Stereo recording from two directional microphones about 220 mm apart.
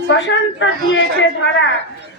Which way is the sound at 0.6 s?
55° left (ahead or behind).